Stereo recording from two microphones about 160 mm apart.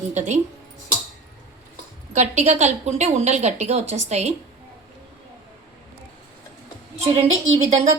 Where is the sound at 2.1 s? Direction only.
45° right (ahead or behind).